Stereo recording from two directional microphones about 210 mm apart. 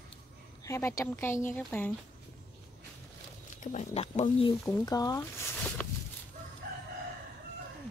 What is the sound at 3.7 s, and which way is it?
Speech, 30° left (ahead or behind).